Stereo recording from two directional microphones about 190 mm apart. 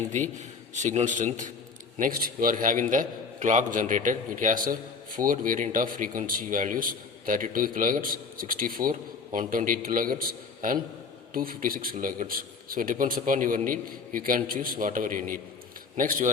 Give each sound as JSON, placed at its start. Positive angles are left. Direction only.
{"t": 0.1, "sound": "a man's voice", "side_deg": -40}